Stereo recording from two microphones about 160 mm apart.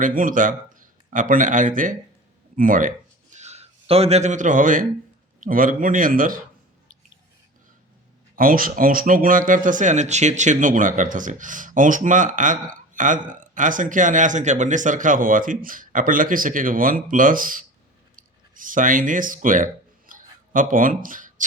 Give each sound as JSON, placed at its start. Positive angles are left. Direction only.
{"t": 0.0, "sound": "speech", "side_deg": -60}
{"t": 8.4, "sound": "speech", "side_deg": -60}
{"t": 18.2, "sound": "a sound", "side_deg": -60}